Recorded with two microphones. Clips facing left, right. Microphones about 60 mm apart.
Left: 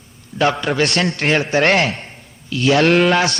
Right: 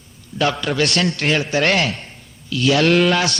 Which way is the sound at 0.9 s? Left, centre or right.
Left.